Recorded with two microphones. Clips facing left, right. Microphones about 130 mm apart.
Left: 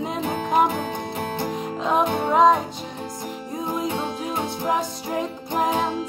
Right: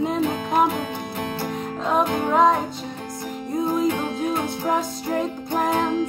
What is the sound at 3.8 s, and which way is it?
Music, 15° left (ahead or behind).